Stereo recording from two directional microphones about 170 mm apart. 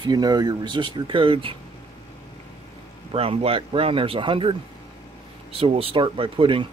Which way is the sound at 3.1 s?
35° right (ahead or behind).